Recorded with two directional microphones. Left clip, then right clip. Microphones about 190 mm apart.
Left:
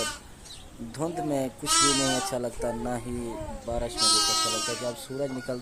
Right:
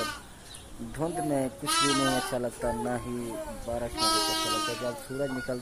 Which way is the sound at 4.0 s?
55° left (ahead or behind).